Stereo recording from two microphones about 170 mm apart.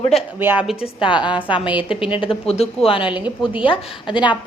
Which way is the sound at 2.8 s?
30° left (ahead or behind).